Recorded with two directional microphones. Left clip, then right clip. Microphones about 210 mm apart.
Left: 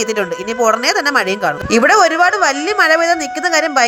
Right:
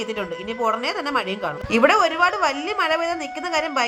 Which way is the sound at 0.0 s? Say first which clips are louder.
Left 9 dB; 25° left (ahead or behind).